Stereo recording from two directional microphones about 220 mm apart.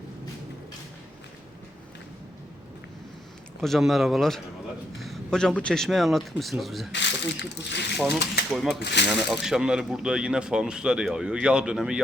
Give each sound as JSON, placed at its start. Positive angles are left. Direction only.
{"t": 3.6, "sound": "speech", "side_deg": 0}
{"t": 6.9, "sound": "speech", "side_deg": 55}
{"t": 7.9, "sound": "speech", "side_deg": 0}
{"t": 8.8, "sound": "speech", "side_deg": 50}
{"t": 9.0, "sound": "speech", "side_deg": 0}